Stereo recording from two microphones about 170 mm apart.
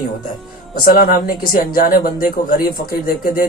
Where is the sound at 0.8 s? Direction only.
60° left (ahead or behind).